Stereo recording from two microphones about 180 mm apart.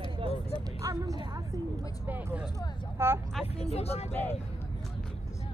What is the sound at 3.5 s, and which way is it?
Speech, 35° left (ahead or behind).